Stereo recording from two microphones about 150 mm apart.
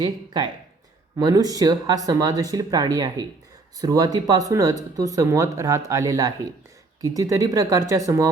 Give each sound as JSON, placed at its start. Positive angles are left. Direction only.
{"t": 0.0, "sound": "speech", "side_deg": -30}